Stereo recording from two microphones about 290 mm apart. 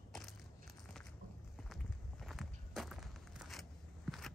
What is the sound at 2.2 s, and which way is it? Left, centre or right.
Walk, centre.